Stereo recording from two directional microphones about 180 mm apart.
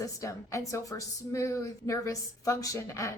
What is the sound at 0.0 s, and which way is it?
A woman's voice, 20° left (ahead or behind).